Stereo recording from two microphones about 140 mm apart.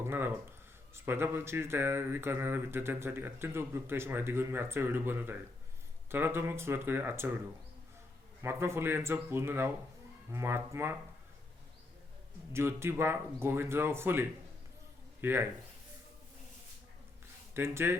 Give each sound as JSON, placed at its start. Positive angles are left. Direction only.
{"t": 0.0, "sound": "speech", "side_deg": -15}
{"t": 8.4, "sound": "speech", "side_deg": -20}
{"t": 12.5, "sound": "speech", "side_deg": -20}
{"t": 17.5, "sound": "speech", "side_deg": -15}